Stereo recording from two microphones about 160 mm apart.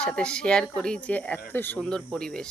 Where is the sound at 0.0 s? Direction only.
5° left (ahead or behind).